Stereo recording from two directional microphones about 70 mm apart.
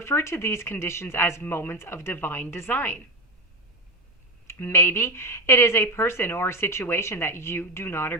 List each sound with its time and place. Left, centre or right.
0.0 s speech: left
4.4 s speech: left